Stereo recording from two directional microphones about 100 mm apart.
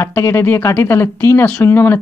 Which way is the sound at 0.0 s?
30° left (ahead or behind).